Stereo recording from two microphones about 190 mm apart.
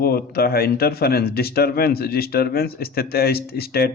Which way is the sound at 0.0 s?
55° left (ahead or behind).